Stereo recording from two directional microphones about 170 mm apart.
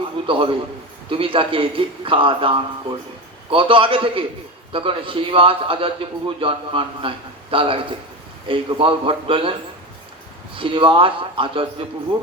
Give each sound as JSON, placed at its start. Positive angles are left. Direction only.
{"t": 0.3, "sound": "a man's voice", "side_deg": -30}